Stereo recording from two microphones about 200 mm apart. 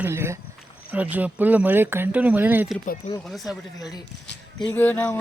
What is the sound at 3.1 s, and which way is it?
Speech, 35° left (ahead or behind).